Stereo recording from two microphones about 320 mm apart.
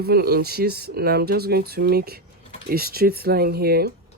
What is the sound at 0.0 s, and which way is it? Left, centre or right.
Speech, right.